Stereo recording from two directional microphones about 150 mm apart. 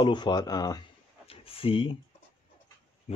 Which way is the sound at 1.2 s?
40° left (ahead or behind).